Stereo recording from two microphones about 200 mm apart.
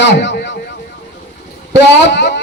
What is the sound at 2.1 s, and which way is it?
Speech, 60° left (ahead or behind).